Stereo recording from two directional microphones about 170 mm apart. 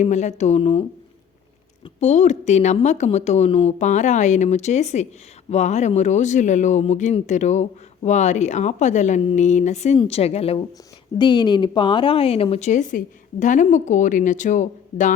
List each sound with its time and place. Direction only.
0.0 s speech: 45° left (ahead or behind)
2.0 s a woman's voice: 45° left (ahead or behind)
11.2 s a woman's voice: 25° left (ahead or behind); by 15.1 s 45° left (ahead or behind)